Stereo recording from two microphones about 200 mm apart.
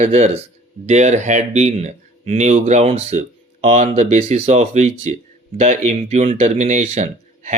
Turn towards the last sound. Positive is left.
turn(degrees=-35)  # may be behind; listen again after turning